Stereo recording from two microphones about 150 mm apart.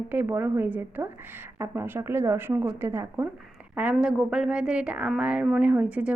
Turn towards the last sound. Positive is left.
turn(degrees=-10)  # may be behind; listen again after turning